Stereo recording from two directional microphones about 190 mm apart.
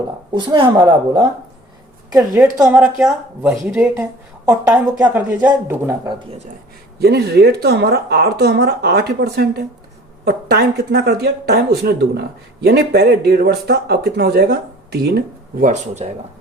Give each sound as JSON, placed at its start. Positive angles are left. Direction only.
{"t": 0.3, "sound": "a woman's voice", "side_deg": -25}
{"t": 5.1, "sound": "speech", "side_deg": -10}
{"t": 7.0, "sound": "speech", "side_deg": -60}
{"t": 15.6, "sound": "speech", "side_deg": -40}